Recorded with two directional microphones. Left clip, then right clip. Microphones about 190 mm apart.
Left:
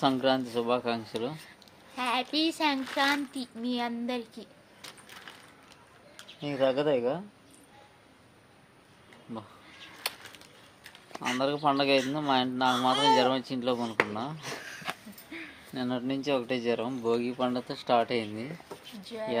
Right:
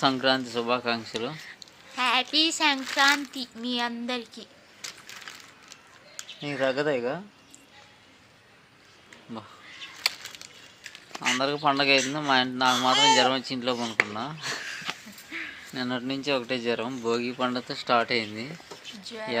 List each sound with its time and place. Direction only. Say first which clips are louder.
0.0 s speech: right 3 dB; 10° right (ahead or behind)
2.0 s speech: right 6 dB; 10° left (ahead or behind)
4.8 s a sound: right 7 dB; 20° left (ahead or behind)
6.4 s speech: right 1 dB; 10° right (ahead or behind)
10.0 s a sound: right 8 dB; 25° left (ahead or behind)
11.6 s speech: right 3 dB; 10° right (ahead or behind)
14.6 s a sound: right 4 dB; 10° left (ahead or behind)
15.7 s speech: right 1 dB; 10° right (ahead or behind)
19.0 s speech: even; 5° left (ahead or behind)